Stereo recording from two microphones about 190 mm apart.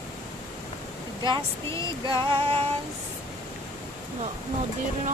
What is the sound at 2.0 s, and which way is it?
Female singing, 25° right (ahead or behind).